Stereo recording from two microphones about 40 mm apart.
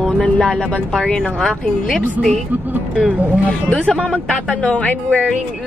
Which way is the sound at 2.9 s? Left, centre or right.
Right.